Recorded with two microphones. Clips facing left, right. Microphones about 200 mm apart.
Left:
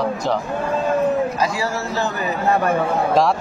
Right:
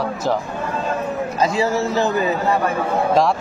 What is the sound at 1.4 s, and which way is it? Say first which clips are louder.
Speech: right 4 dB; 20° right (ahead or behind).